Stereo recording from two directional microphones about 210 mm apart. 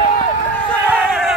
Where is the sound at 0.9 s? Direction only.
5° right (ahead or behind).